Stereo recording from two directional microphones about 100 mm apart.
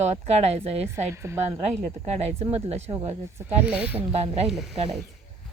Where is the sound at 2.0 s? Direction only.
90° right.